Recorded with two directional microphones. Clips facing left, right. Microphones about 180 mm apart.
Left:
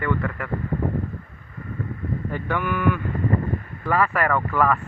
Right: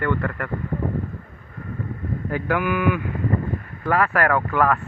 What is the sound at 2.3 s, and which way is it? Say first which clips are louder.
Speech: right 4 dB; 5° right (ahead or behind).